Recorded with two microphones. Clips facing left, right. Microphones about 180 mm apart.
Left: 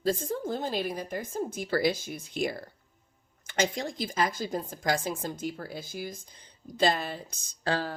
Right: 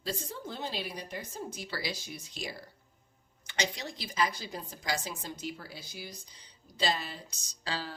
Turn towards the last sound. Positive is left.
turn(degrees=50)  # may be behind; listen again after turning